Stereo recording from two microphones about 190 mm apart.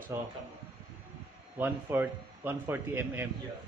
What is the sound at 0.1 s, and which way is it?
Speech, 15° right (ahead or behind).